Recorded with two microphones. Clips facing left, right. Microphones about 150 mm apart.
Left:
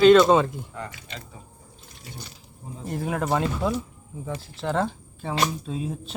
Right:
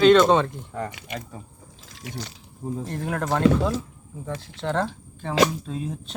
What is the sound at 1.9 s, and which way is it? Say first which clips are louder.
Speech: right 7 dB; 90° right.